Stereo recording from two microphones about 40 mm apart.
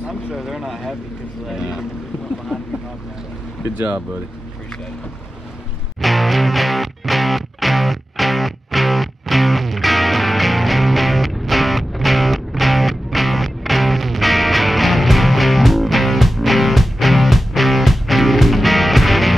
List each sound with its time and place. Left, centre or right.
0.1 s speech: centre
1.6 s speech: centre
3.7 s speech: right
5.9 s music: centre